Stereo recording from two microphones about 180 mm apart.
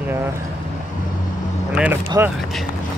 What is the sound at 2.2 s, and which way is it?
Speech, 15° right (ahead or behind).